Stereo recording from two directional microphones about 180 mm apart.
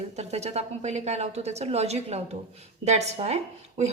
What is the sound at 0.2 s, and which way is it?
A woman's voice, 40° right (ahead or behind).